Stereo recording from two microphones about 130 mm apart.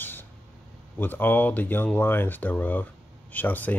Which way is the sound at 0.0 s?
15° left (ahead or behind).